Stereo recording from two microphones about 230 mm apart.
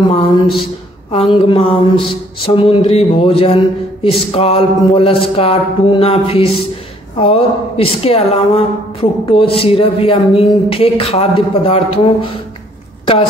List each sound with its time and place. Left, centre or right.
0.0 s a man's voice: left